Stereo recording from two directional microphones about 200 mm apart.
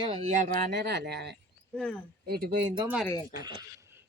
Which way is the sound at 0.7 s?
55° right (ahead or behind).